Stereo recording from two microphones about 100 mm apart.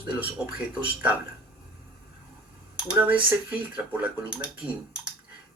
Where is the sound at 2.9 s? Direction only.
10° right (ahead or behind).